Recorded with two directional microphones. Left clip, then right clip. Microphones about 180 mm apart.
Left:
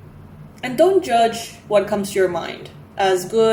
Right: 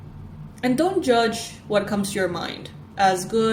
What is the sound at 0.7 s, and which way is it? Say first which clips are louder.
A woman's voice: left 5 dB; 55° right (ahead or behind).